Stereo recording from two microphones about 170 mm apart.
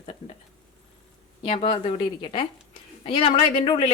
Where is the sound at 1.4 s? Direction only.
35° left (ahead or behind).